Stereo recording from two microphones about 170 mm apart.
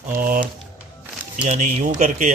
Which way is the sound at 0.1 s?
55° right (ahead or behind).